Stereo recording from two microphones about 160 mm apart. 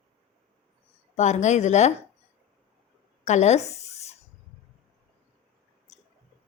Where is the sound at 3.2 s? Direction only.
45° left (ahead or behind).